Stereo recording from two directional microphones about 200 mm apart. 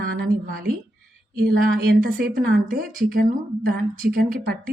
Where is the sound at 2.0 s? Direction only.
45° right (ahead or behind).